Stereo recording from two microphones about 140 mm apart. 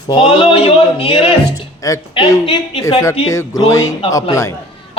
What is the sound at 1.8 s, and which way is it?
Music, 25° left (ahead or behind).